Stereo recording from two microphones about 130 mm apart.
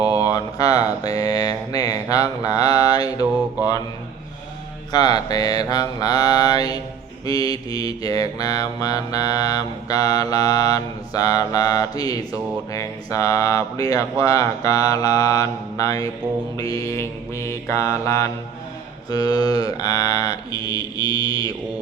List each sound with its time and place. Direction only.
0.0 s mantra: 30° left (ahead or behind)
4.9 s mantra: 30° left (ahead or behind)